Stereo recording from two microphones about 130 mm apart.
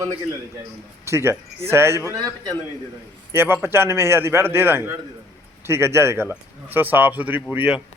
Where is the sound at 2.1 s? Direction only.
30° right (ahead or behind).